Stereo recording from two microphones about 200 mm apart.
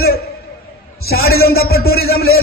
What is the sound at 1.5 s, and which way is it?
Speech, 50° left (ahead or behind).